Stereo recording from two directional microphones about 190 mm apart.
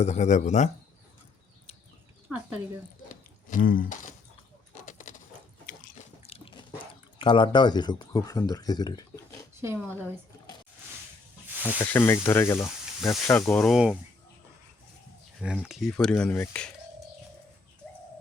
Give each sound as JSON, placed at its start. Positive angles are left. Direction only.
{"t": 0.0, "sound": "speech", "side_deg": 35}
{"t": 2.3, "sound": "speech", "side_deg": -10}
{"t": 3.5, "sound": "a sound", "side_deg": 45}
{"t": 6.2, "sound": "a sound", "side_deg": 30}
{"t": 7.2, "sound": "speech", "side_deg": 25}
{"t": 9.6, "sound": "speech", "side_deg": -15}
{"t": 11.8, "sound": "speech", "side_deg": 10}
{"t": 13.7, "sound": "speech", "side_deg": -5}
{"t": 15.4, "sound": "speech", "side_deg": -5}